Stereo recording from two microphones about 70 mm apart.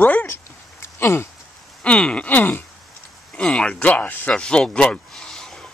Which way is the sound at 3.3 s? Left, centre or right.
Centre.